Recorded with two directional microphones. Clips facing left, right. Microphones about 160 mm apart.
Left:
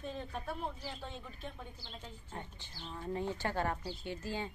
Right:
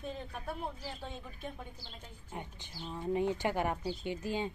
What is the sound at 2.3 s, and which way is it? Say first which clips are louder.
Speech: right 5 dB; 10° right (ahead or behind).